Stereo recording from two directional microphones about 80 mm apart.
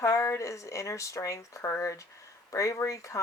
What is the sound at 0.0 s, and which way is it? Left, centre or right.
Speech, left.